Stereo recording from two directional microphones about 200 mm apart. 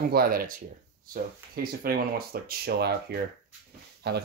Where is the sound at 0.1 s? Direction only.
50° right (ahead or behind).